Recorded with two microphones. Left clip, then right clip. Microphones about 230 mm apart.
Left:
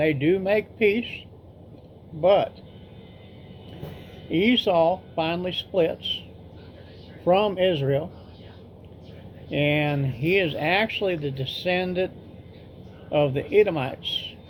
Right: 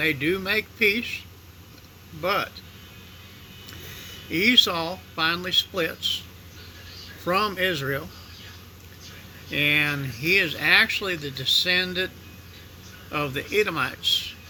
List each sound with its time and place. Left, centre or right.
0.0 s speech: centre
2.2 s speech: centre
4.3 s speech: centre
7.3 s speech: right
9.5 s speech: centre
13.3 s speech: centre